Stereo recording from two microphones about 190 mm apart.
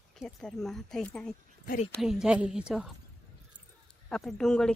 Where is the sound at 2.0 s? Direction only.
5° right (ahead or behind).